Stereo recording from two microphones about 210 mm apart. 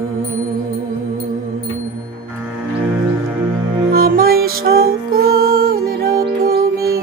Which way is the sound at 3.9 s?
45° right (ahead or behind).